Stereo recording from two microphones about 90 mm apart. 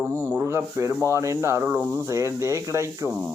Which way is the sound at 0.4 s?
30° right (ahead or behind).